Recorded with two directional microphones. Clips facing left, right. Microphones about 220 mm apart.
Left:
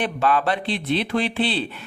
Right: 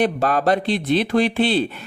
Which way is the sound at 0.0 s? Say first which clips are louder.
Right 3 dB; 40° right (ahead or behind).